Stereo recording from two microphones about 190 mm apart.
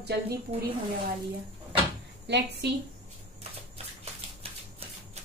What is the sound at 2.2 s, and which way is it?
Speech, 60° right (ahead or behind).